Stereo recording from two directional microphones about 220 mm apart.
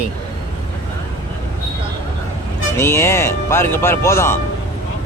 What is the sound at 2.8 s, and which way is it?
Speech, 10° left (ahead or behind).